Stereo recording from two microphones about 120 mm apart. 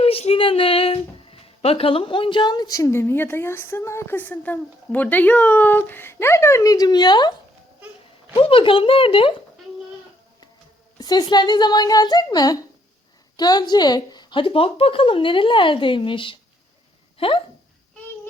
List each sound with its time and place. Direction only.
0.0 s speech: 55° left (ahead or behind); by 7.3 s 35° left (ahead or behind)
8.4 s a woman's voice: 45° left (ahead or behind)
10.9 s a woman's voice: 35° left (ahead or behind); by 17.4 s 50° left (ahead or behind)